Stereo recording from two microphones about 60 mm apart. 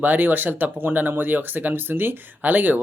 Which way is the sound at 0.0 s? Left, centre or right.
Right.